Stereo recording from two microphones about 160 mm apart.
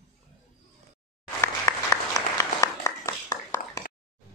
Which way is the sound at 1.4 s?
20° left (ahead or behind).